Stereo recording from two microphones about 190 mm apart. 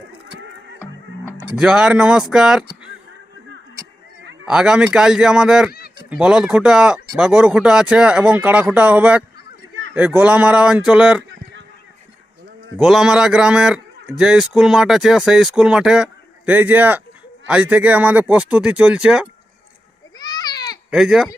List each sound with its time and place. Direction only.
1.5 s a man's voice: 5° right (ahead or behind)
4.4 s a man's voice: 5° right (ahead or behind)
12.7 s a man's voice: 5° right (ahead or behind)
20.1 s goat: 20° left (ahead or behind)
20.9 s a man's voice: centre (ahead or behind)